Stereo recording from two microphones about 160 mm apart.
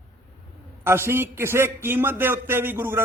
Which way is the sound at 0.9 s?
15° right (ahead or behind).